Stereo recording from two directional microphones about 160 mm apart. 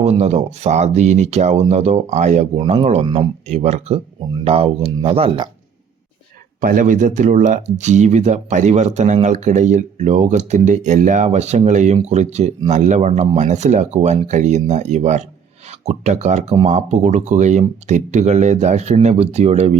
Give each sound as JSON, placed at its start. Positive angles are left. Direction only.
{"t": 0.0, "sound": "speech", "side_deg": -40}
{"t": 6.6, "sound": "speech", "side_deg": -60}